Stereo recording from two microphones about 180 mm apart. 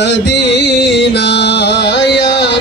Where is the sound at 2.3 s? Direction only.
70° left (ahead or behind).